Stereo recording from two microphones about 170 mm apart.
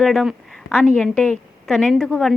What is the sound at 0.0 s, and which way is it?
Speech, centre (ahead or behind).